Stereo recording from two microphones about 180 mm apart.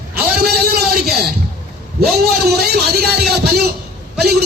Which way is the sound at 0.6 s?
60° right (ahead or behind).